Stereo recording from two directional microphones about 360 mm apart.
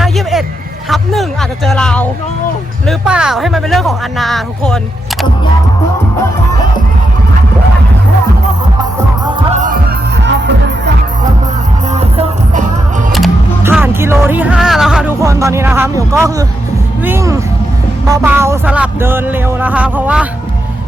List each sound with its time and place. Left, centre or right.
0.0 s hubbub: centre
0.9 s speech: centre
11.9 s music: centre
13.1 s music: centre
17.0 s speech: centre